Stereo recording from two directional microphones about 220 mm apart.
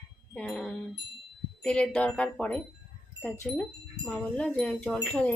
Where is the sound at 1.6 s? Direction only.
5° left (ahead or behind).